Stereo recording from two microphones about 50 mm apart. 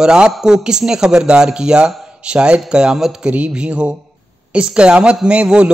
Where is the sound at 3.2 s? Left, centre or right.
Right.